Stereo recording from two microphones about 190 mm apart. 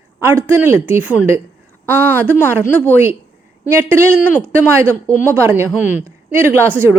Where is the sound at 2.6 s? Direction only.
10° left (ahead or behind).